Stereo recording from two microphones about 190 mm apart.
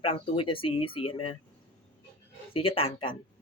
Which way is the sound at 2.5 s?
30° left (ahead or behind).